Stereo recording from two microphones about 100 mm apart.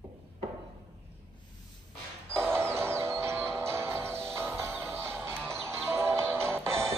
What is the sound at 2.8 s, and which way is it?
Music, 25° right (ahead or behind).